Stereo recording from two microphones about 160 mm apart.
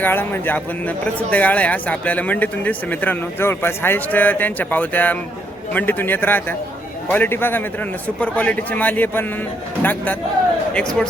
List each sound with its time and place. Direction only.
0.0 s speech: 10° left (ahead or behind)